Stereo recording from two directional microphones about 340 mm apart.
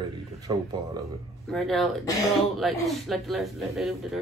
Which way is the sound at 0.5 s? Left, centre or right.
Centre.